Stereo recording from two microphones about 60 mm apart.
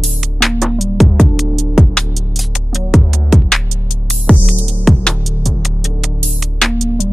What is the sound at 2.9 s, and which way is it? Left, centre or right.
Music, centre.